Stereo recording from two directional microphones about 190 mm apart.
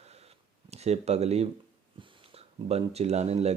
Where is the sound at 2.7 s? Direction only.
35° right (ahead or behind).